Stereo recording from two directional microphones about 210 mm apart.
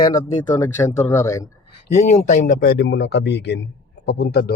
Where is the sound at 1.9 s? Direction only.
35° left (ahead or behind).